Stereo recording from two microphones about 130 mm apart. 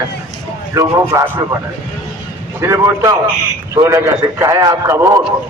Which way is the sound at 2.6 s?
25° right (ahead or behind).